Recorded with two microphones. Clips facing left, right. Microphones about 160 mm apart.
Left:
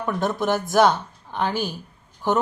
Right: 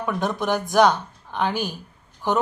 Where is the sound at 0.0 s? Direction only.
Centre (ahead or behind).